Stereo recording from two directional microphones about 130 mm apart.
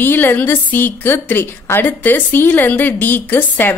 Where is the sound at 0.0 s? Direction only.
15° left (ahead or behind).